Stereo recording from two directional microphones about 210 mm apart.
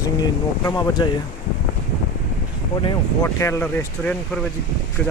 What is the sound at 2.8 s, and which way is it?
Speech, 15° left (ahead or behind).